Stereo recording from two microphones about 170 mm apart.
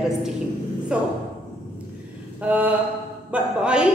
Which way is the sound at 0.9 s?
5° right (ahead or behind).